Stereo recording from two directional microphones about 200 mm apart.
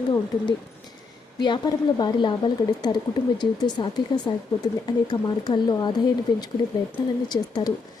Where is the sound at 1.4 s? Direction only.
20° left (ahead or behind).